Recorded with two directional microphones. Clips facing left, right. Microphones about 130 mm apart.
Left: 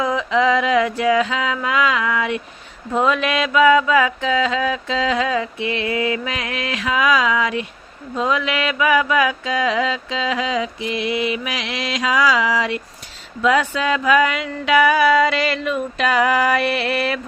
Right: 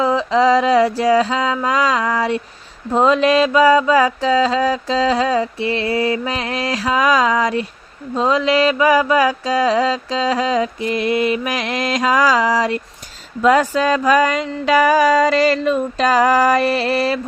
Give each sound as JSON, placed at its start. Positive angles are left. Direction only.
{"t": 0.0, "sound": "mantra", "side_deg": -30}